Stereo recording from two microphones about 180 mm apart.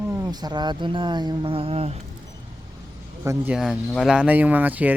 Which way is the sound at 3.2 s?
15° right (ahead or behind).